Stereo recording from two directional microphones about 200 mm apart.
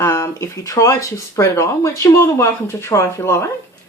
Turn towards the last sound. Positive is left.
turn(degrees=15)  # may be behind; listen again after turning